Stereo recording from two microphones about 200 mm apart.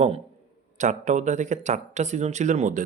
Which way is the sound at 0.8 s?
35° right (ahead or behind).